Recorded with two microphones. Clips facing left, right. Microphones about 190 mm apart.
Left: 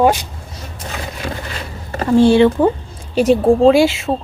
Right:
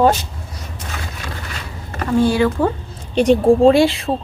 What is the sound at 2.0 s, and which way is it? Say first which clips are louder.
Speech: left 5 dB; 30° left (ahead or behind).